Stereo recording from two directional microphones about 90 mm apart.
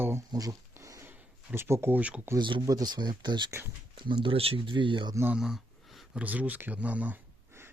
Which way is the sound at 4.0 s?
70° right (ahead or behind).